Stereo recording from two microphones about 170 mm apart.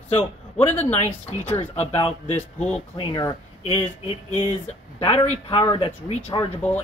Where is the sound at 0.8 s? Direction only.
35° left (ahead or behind).